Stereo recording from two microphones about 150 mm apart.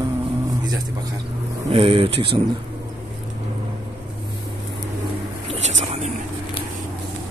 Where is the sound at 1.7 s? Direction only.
35° right (ahead or behind).